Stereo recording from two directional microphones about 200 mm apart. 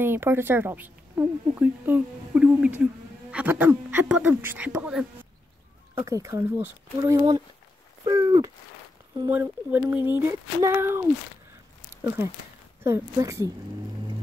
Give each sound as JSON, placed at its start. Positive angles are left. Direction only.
{"t": 0.0, "sound": "speech", "side_deg": -10}
{"t": 8.0, "sound": "a sound", "side_deg": -20}
{"t": 9.2, "sound": "speech", "side_deg": -10}